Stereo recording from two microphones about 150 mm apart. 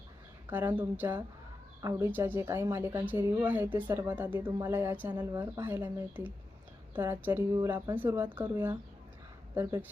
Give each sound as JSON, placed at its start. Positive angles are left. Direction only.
{"t": 0.5, "sound": "speech", "side_deg": -10}